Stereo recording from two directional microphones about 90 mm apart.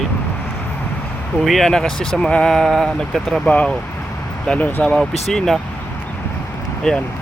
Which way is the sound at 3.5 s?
15° left (ahead or behind).